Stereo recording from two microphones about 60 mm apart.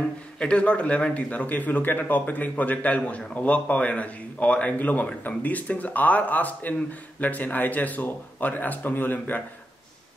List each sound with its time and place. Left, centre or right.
0.4 s a man's voice: centre